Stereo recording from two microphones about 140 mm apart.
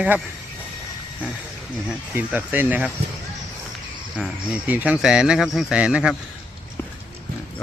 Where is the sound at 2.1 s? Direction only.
15° right (ahead or behind).